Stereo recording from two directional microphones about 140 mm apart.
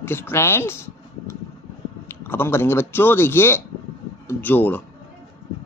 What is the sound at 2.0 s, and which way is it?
Speech, 15° left (ahead or behind).